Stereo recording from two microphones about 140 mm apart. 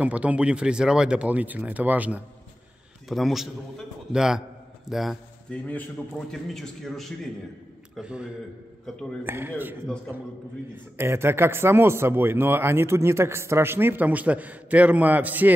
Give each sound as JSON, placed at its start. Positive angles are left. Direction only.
{"t": 0.0, "sound": "speech", "side_deg": -10}
{"t": 3.1, "sound": "a man's voice", "side_deg": 0}